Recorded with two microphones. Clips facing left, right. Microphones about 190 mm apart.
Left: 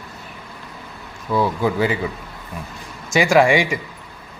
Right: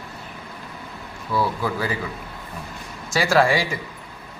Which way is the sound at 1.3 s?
20° left (ahead or behind).